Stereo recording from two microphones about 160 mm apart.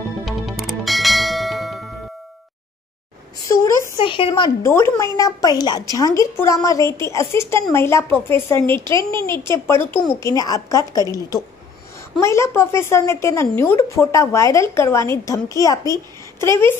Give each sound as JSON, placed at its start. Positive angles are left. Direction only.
{"t": 0.2, "sound": "clang", "side_deg": 0}
{"t": 4.0, "sound": "speech", "side_deg": 30}
{"t": 4.6, "sound": "a woman's voice", "side_deg": 15}